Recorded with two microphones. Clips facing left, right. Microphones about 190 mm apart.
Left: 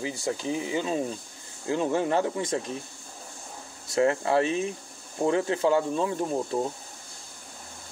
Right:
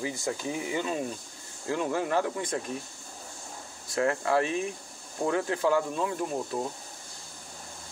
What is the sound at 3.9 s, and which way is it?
Speech, 25° left (ahead or behind).